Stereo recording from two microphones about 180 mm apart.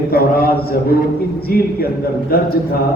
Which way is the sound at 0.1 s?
55° left (ahead or behind).